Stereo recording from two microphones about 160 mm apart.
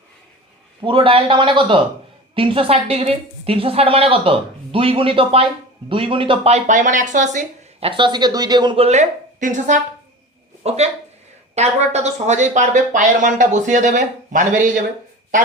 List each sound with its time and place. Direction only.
0.8 s a woman's voice: 30° right (ahead or behind); by 7.4 s 50° right (ahead or behind)
7.8 s a woman's voice: 35° right (ahead or behind); by 14.7 s 50° right (ahead or behind)